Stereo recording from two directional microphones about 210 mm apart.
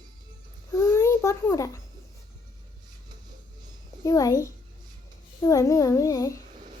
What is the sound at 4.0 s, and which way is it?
A child's voice, 15° left (ahead or behind).